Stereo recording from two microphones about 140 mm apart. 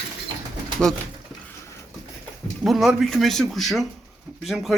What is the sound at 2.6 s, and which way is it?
Speech, centre (ahead or behind).